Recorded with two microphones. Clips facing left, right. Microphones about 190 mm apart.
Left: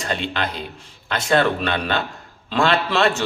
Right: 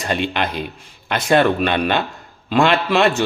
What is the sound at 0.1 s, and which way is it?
A man's voice, 15° right (ahead or behind).